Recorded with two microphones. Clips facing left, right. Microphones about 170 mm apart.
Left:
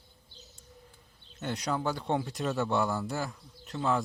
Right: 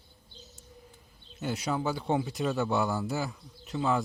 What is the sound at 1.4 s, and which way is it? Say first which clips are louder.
Speech: right 1 dB; 5° right (ahead or behind).